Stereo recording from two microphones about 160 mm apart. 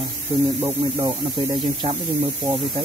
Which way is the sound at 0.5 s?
40° right (ahead or behind).